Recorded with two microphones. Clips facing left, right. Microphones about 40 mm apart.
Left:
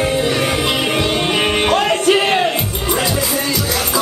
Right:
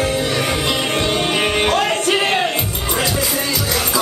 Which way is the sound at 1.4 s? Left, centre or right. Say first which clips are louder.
Left 2 dB; centre.